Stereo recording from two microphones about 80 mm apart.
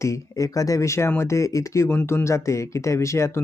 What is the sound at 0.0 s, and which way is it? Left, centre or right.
Speech, left.